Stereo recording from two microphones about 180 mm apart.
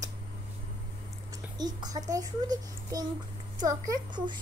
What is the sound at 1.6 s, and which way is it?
A child's voice, 20° right (ahead or behind).